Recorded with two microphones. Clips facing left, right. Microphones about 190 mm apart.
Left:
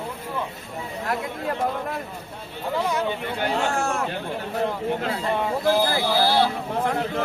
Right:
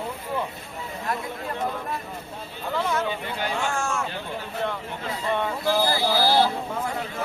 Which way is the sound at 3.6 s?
35° left (ahead or behind).